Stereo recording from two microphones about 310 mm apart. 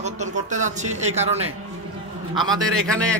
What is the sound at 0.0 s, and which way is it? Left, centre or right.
A man's voice, right.